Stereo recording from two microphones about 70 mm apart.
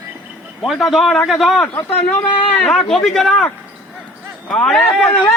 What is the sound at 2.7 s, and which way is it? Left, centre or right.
Speech, centre.